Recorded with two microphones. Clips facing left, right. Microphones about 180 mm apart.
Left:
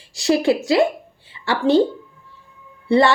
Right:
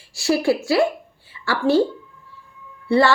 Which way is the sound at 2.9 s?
20° left (ahead or behind).